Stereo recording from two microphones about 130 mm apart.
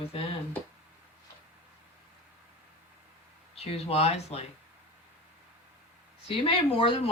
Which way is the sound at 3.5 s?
50° left (ahead or behind).